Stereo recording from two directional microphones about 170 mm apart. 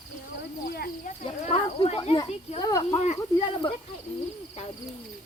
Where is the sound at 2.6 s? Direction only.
25° left (ahead or behind).